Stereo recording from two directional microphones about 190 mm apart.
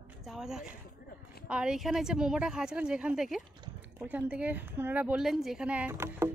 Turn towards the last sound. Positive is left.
turn(degrees=-10)  # may be behind; listen again after turning